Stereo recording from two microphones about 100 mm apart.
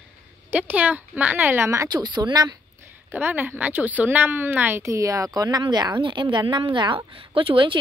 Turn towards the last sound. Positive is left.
turn(degrees=-60)  # may be behind; listen again after turning